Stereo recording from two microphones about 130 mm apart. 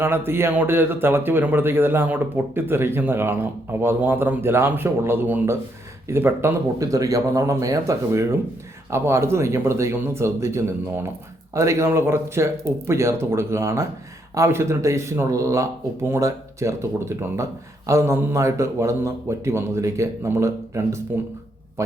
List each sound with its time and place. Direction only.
0.0 s a man's voice: 15° right (ahead or behind)